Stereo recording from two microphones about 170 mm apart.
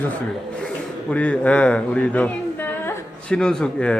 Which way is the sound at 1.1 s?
10° left (ahead or behind).